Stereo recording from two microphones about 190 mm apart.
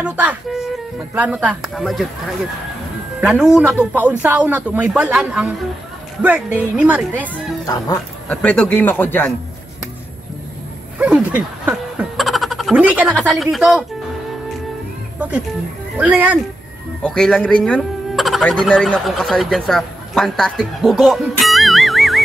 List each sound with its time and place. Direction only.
0.0 s a woman's voice: 5° right (ahead or behind)
3.2 s a woman's voice: 5° right (ahead or behind)
7.6 s speech: 20° left (ahead or behind)
8.4 s speech: 10° left (ahead or behind)
11.0 s speech: 10° right (ahead or behind)
15.1 s a woman's voice: 5° right (ahead or behind)
17.0 s speech: 5° left (ahead or behind)